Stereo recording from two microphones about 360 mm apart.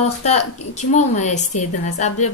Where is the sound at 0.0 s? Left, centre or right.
Centre.